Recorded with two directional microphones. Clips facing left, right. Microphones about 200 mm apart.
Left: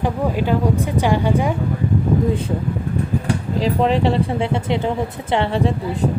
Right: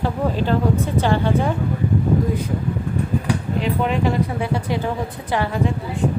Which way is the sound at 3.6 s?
35° left (ahead or behind).